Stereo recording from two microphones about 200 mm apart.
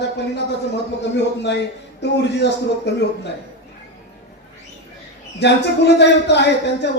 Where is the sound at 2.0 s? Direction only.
60° left (ahead or behind).